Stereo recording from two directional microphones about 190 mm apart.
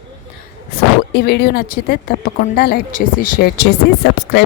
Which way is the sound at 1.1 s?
55° left (ahead or behind).